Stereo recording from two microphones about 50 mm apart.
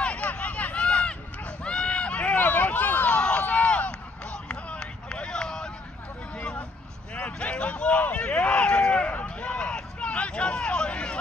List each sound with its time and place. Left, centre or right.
0.0 s run: left
2.3 s run: left
3.2 s a sound: left